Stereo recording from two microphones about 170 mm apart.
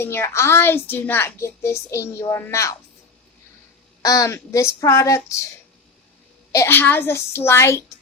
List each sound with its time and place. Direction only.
0.0 s a woman's voice: 15° left (ahead or behind)
4.0 s speech: 20° left (ahead or behind)
6.5 s a woman's voice: 15° left (ahead or behind)